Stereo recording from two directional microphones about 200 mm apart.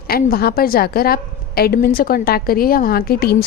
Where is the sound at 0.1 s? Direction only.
50° left (ahead or behind).